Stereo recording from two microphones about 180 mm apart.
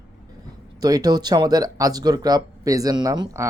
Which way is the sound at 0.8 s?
20° right (ahead or behind).